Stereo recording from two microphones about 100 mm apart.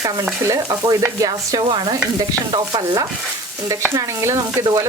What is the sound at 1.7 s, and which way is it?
Speech, 50° right (ahead or behind).